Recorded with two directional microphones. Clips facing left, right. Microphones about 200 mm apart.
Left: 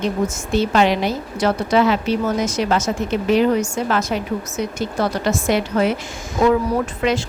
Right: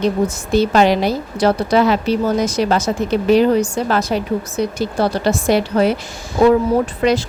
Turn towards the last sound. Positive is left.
turn(degrees=-35)  # may be behind; listen again after turning